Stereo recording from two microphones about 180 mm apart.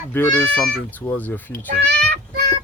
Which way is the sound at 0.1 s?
10° left (ahead or behind).